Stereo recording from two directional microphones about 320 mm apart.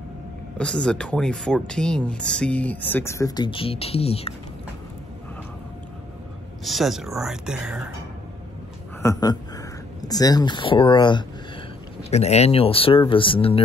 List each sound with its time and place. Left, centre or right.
0.6 s speech: centre
6.6 s speech: centre
9.0 s speech: centre